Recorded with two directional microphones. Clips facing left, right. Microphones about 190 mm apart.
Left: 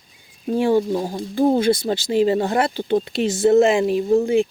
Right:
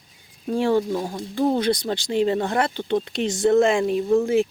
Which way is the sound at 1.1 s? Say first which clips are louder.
Left 4 dB; 30° left (ahead or behind).